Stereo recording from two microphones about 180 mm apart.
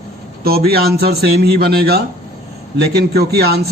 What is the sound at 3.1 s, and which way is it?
Speech, 65° right (ahead or behind).